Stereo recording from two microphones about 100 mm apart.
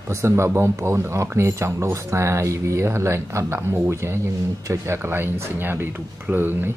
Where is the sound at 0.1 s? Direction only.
30° right (ahead or behind).